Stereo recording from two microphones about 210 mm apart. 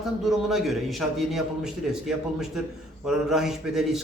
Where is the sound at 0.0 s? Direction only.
Centre (ahead or behind).